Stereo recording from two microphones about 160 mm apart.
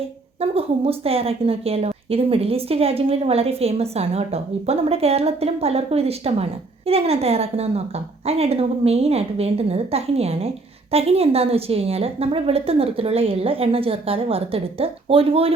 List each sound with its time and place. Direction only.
0.5 s a woman's voice: 35° right (ahead or behind)